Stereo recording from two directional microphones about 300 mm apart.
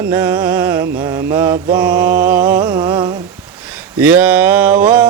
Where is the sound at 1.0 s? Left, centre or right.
Centre.